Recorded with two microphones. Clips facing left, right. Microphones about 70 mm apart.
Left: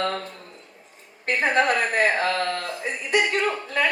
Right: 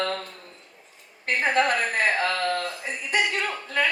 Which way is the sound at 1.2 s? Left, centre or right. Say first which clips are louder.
Left 2 dB; left.